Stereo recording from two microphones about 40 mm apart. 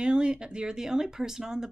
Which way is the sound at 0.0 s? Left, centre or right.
Right.